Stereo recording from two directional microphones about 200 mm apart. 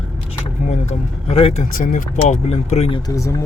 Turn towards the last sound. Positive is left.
turn(degrees=15)  # may be behind; listen again after turning